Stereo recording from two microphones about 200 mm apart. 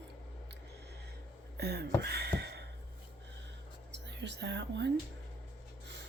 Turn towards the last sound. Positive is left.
turn(degrees=-65)  # may be behind; listen again after turning